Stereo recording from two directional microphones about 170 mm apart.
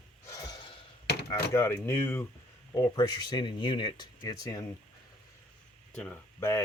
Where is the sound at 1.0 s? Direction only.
75° left (ahead or behind).